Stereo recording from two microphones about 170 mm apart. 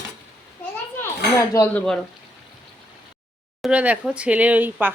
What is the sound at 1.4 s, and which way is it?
Speech, 15° left (ahead or behind).